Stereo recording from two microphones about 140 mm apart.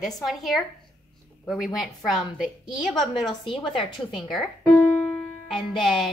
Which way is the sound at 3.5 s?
35° left (ahead or behind).